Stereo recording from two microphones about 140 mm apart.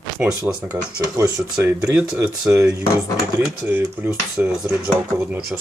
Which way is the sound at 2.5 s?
20° right (ahead or behind).